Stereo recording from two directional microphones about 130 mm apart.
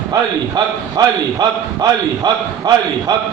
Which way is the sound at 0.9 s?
30° right (ahead or behind).